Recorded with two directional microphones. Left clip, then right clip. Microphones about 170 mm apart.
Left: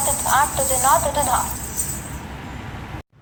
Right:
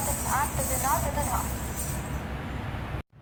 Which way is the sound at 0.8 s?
40° left (ahead or behind).